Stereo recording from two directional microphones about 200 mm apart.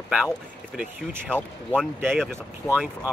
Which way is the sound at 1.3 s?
5° left (ahead or behind).